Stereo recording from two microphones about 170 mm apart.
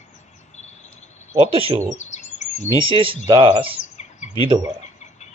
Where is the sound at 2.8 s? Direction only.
30° right (ahead or behind).